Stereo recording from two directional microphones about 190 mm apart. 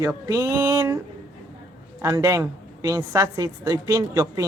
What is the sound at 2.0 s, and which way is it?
A woman's voice, 15° right (ahead or behind).